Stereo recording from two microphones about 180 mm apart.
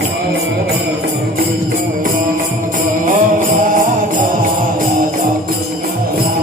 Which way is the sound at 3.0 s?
45° right (ahead or behind).